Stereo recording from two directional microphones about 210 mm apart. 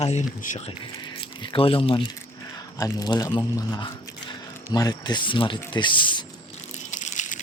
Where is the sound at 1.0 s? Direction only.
25° left (ahead or behind).